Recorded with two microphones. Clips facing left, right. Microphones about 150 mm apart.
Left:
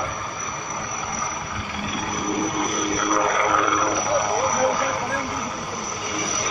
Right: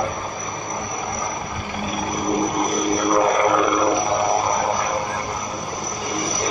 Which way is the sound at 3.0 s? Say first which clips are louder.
Right 5 dB; 30° right (ahead or behind).